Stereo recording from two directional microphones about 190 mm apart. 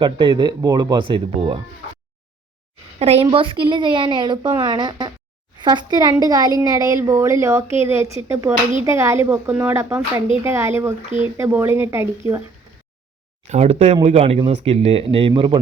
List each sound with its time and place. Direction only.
0.0 s a woman's voice: 25° right (ahead or behind)
3.0 s a woman's voice: 30° right (ahead or behind); by 12.4 s 15° right (ahead or behind)
13.5 s speech: 35° right (ahead or behind)